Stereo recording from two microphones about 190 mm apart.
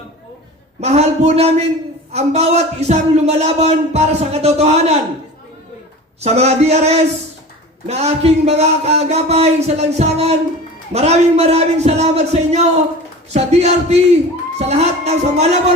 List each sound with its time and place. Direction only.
0.8 s a man's voice: 35° right (ahead or behind)
6.1 s a man's voice: 35° right (ahead or behind)